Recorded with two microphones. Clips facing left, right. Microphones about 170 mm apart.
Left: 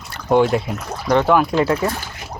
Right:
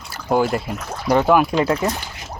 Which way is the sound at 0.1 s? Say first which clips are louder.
Left 3 dB; 5° right (ahead or behind).